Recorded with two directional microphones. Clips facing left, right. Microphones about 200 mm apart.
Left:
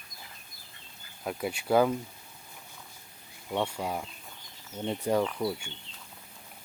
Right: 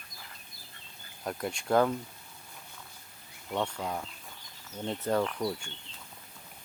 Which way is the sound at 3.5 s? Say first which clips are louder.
Left 2 dB; 10° left (ahead or behind).